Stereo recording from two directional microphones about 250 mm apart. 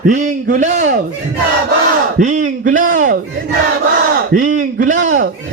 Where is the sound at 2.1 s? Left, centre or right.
Right.